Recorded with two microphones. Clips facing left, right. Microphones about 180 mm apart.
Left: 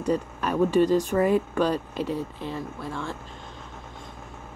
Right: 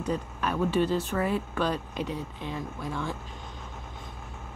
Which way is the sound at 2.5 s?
Centre (ahead or behind).